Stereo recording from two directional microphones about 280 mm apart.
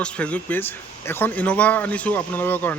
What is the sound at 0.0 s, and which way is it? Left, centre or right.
Speech, centre.